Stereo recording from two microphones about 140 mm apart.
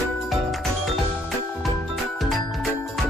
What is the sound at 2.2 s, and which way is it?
Music, centre (ahead or behind).